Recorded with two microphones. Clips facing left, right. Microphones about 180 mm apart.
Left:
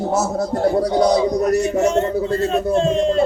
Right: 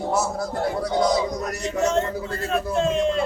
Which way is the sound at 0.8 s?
25° left (ahead or behind).